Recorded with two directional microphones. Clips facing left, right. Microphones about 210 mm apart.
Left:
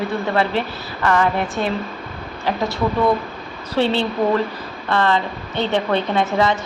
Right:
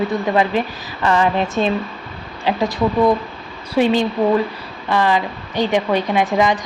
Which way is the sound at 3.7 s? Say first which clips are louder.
Right 3 dB; 10° right (ahead or behind).